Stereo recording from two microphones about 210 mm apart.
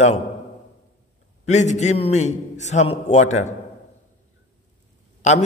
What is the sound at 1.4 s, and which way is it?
A man's voice, 35° left (ahead or behind).